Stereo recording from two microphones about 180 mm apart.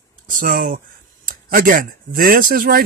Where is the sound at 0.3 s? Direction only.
50° right (ahead or behind).